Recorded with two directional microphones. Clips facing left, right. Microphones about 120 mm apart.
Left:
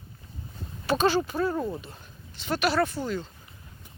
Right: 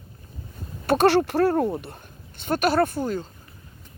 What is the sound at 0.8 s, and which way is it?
Speech, 65° right (ahead or behind).